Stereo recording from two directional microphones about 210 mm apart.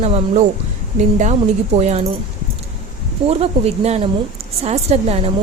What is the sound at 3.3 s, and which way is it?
A woman's voice, 30° right (ahead or behind).